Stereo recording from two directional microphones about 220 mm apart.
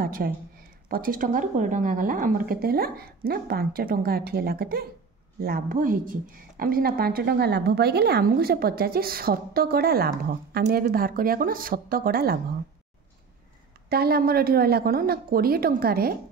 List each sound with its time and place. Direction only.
0.0 s a sound: 40° right (ahead or behind)
0.8 s a woman's voice: 40° right (ahead or behind)
13.8 s a woman's voice: 45° right (ahead or behind)